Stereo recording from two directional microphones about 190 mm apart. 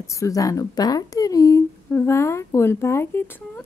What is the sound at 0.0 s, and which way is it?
Speech, 15° left (ahead or behind).